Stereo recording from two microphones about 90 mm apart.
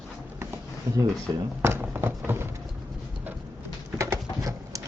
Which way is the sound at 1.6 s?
25° right (ahead or behind).